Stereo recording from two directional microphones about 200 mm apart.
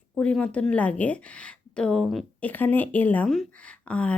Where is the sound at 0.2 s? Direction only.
5° left (ahead or behind).